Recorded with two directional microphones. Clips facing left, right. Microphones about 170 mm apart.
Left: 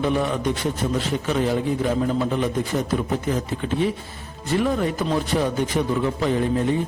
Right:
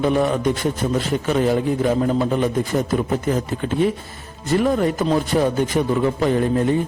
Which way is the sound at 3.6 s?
45° right (ahead or behind).